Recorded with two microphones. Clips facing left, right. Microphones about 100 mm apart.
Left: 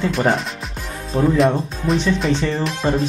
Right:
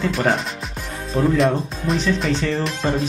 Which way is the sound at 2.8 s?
15° left (ahead or behind).